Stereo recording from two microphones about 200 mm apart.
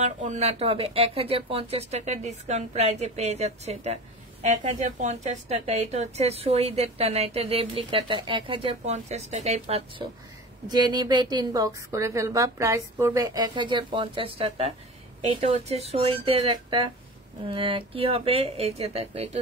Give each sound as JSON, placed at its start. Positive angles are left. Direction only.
{"t": 0.0, "sound": "a woman's voice", "side_deg": -35}